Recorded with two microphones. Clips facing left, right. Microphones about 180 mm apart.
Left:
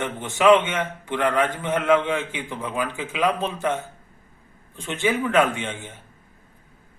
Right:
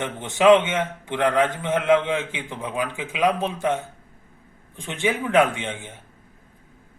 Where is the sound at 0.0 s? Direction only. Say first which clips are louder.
Right 1 dB; 20° right (ahead or behind).